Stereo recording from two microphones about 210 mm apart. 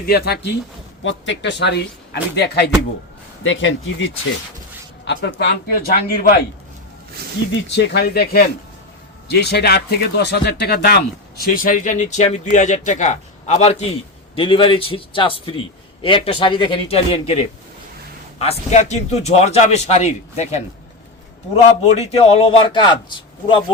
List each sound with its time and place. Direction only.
0.0 s a man's voice: 50° left (ahead or behind)
1.0 s speech: 60° left (ahead or behind)
3.4 s a man's voice: 65° left (ahead or behind); by 6.4 s 45° left (ahead or behind)
7.5 s a man's voice: 55° left (ahead or behind); by 23.0 s 25° left (ahead or behind)